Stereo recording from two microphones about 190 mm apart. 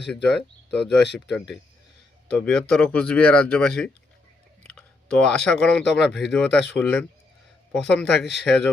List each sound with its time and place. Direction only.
0.3 s speech: 60° left (ahead or behind)
2.4 s speech: 5° left (ahead or behind)